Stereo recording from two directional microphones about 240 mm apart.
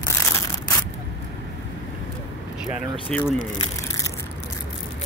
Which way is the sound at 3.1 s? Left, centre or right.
Centre.